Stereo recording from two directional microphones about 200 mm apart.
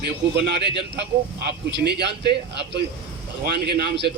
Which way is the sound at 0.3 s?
55° right (ahead or behind).